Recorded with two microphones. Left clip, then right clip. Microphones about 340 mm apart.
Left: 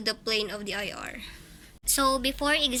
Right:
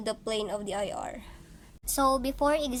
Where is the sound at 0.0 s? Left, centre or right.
Right.